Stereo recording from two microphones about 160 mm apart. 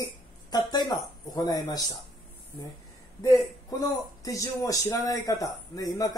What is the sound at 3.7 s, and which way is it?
Speech, 20° left (ahead or behind).